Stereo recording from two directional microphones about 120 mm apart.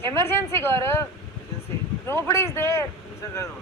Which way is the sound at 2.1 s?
20° left (ahead or behind).